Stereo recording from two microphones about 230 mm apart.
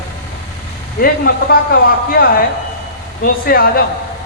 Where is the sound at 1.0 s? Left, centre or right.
Left.